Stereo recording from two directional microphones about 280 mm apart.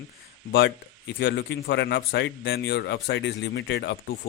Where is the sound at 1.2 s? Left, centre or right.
Left.